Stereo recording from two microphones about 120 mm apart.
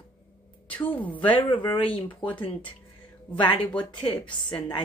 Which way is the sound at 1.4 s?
45° left (ahead or behind).